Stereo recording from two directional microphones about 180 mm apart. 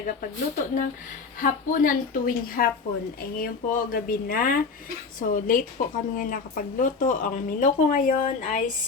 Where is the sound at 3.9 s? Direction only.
55° left (ahead or behind).